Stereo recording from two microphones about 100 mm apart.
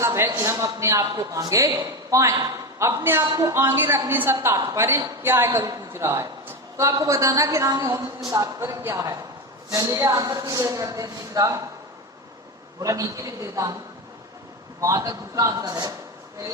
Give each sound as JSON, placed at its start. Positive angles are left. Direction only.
{"t": 0.0, "sound": "a sound", "side_deg": -25}
{"t": 0.3, "sound": "a woman's voice", "side_deg": -30}
{"t": 12.8, "sound": "a woman's voice", "side_deg": -35}
{"t": 14.8, "sound": "a woman's voice", "side_deg": -35}